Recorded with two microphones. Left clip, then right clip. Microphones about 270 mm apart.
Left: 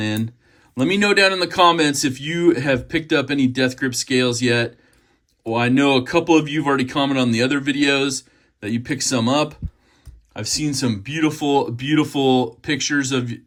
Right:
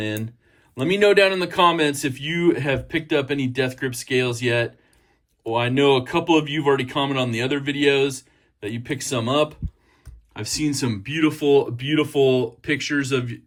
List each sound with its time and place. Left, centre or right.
0.8 s speech: centre
10.3 s speech: centre